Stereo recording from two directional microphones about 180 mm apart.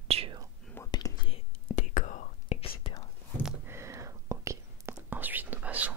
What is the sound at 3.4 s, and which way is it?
Whispering, 15° right (ahead or behind).